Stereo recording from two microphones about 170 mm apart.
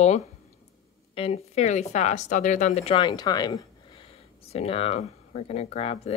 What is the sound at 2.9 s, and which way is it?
Speech, 25° left (ahead or behind).